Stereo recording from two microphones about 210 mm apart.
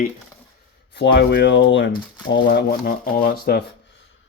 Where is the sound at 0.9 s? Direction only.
55° left (ahead or behind).